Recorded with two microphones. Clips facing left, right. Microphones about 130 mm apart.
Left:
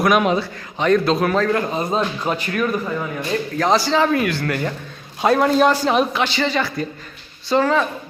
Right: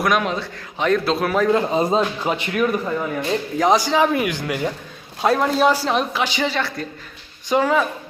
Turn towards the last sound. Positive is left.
turn(degrees=-10)  # may be behind; listen again after turning